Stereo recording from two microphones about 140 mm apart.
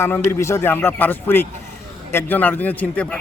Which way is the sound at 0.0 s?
20° left (ahead or behind).